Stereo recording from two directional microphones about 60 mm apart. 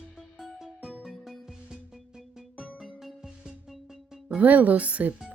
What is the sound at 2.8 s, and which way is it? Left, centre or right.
Music, centre.